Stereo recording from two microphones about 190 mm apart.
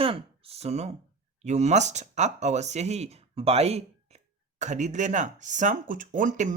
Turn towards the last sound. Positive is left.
turn(degrees=-40)  # may be behind; listen again after turning